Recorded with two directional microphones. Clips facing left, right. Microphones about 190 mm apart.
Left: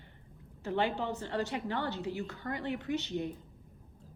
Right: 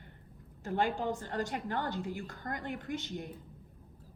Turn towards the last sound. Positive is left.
turn(degrees=-50)  # may be behind; listen again after turning